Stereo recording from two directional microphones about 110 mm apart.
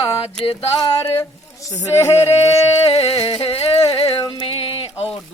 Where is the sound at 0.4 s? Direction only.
60° left (ahead or behind).